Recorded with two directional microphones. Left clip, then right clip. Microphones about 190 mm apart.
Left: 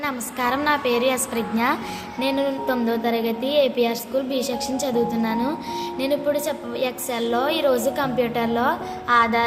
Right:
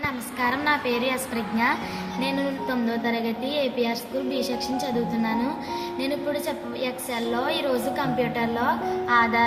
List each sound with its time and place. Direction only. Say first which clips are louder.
0.0 s a woman's voice: left 2 dB; 40° left (ahead or behind)